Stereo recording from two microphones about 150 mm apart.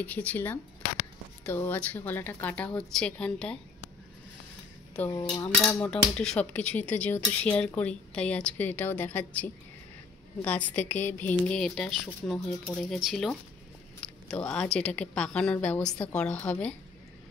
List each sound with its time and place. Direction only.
0.0 s speech: 10° left (ahead or behind)
5.4 s speech: 20° left (ahead or behind)
5.9 s speech: 5° left (ahead or behind)